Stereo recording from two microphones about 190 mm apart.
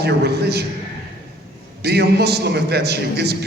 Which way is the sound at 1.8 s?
60° right (ahead or behind).